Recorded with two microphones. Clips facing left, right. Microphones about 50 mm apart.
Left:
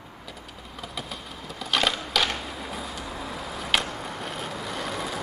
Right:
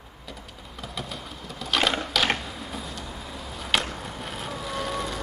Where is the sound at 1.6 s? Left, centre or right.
Centre.